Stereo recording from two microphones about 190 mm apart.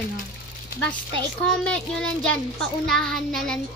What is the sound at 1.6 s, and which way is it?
A child's voice, 5° left (ahead or behind).